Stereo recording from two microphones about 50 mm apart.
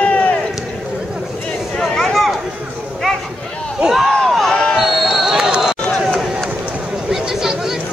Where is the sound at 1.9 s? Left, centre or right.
Centre.